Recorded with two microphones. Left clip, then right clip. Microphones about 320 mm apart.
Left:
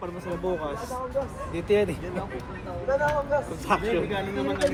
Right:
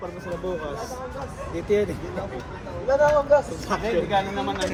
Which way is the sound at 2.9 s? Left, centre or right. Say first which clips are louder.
Right 7 dB; right.